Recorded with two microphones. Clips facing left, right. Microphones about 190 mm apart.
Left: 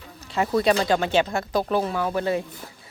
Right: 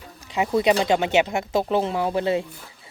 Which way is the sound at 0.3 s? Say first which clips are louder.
Right 1 dB; 15° right (ahead or behind).